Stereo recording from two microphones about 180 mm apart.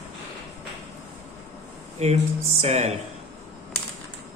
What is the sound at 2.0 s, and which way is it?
Speech, 35° right (ahead or behind).